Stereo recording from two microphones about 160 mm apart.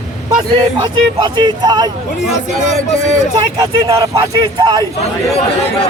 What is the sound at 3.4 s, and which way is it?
Speech, 25° right (ahead or behind).